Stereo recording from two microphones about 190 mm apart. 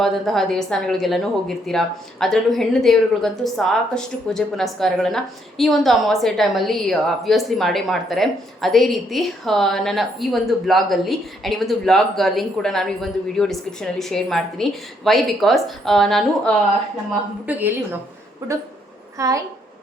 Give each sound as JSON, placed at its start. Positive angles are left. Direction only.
{"t": 0.0, "sound": "a woman's voice", "side_deg": 0}
{"t": 17.4, "sound": "a woman's voice", "side_deg": -10}
{"t": 19.1, "sound": "a woman's voice", "side_deg": -15}